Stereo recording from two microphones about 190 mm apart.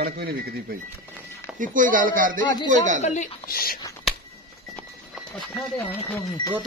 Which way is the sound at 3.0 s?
40° left (ahead or behind).